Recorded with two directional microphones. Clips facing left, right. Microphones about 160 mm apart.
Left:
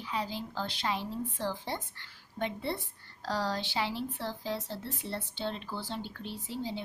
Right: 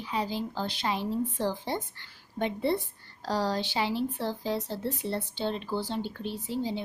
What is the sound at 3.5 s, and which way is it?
Speech, 15° right (ahead or behind).